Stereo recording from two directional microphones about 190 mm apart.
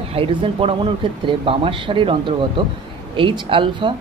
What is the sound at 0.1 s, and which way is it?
Speech, 25° right (ahead or behind).